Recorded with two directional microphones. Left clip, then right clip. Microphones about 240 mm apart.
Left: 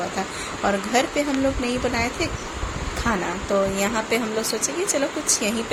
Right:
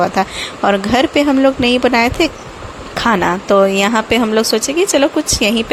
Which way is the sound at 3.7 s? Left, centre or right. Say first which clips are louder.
Right 9 dB; right.